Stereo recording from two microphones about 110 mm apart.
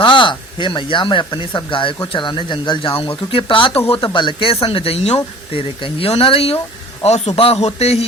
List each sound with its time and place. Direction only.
0.0 s speech: 50° left (ahead or behind)
3.0 s speech: 55° left (ahead or behind)
7.0 s speech: 75° left (ahead or behind)